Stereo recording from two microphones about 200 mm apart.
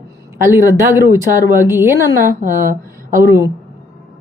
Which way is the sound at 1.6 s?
10° right (ahead or behind).